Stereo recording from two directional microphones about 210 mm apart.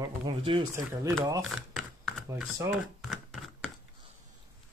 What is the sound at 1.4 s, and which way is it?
Typing, centre (ahead or behind).